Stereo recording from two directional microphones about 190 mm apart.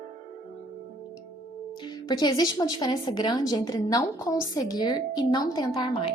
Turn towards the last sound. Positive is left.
turn(degrees=25)  # may be behind; listen again after turning